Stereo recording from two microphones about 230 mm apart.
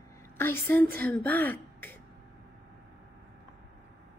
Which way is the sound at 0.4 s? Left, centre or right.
Centre.